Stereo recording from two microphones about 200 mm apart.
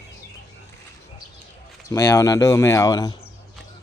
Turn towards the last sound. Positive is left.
turn(degrees=20)  # may be behind; listen again after turning